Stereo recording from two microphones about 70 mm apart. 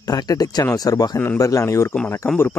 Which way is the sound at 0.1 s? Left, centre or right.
Left.